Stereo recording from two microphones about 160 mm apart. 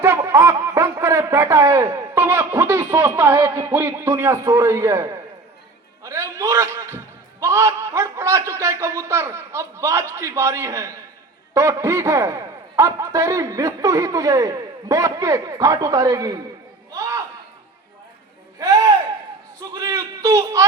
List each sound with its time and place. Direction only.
0.0 s snicker: 15° right (ahead or behind)
3.5 s a man's voice: 15° right (ahead or behind)
6.0 s a sound: 20° right (ahead or behind)
11.5 s a man's voice: 20° right (ahead or behind)
16.9 s a sound: 20° right (ahead or behind)
19.7 s speech: 20° right (ahead or behind)